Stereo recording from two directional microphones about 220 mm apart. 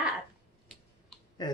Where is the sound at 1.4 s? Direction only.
20° left (ahead or behind).